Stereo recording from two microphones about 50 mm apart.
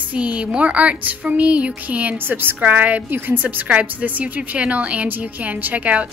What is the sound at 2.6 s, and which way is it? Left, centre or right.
A woman's voice, right.